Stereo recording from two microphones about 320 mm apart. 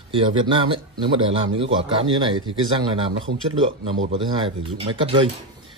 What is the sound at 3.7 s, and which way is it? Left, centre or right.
A man's voice, centre.